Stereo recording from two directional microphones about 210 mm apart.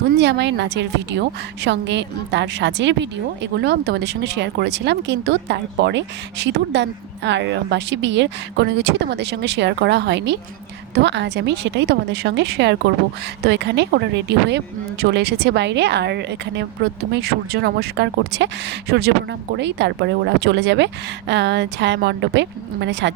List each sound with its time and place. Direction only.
0.2 s a woman's voice: 55° right (ahead or behind)